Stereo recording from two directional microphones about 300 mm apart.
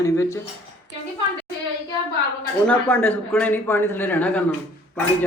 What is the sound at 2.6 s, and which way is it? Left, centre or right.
Speech, centre.